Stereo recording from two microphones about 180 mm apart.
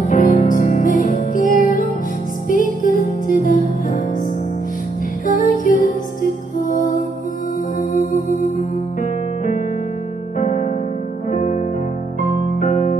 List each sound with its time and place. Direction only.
0.0 s music: 45° left (ahead or behind)
5.2 s music: 45° left (ahead or behind)
10.4 s music: 50° left (ahead or behind)
12.5 s music: 45° left (ahead or behind)